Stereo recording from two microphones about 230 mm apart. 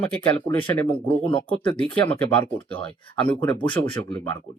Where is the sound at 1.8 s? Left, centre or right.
Centre.